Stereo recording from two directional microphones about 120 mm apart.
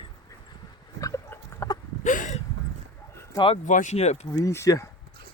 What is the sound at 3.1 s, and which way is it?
Bow-wow, 20° left (ahead or behind).